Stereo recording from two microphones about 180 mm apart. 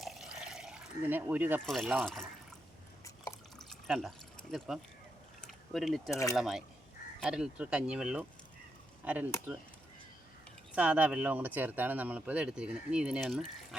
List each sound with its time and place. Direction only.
0.0 s pour: centre (ahead or behind)
1.6 s speech: centre (ahead or behind)
3.8 s speech: centre (ahead or behind)
5.4 s mechanisms: centre (ahead or behind)
6.1 s speech: 15° left (ahead or behind)
6.3 s speech: centre (ahead or behind)
10.8 s speech: 10° right (ahead or behind)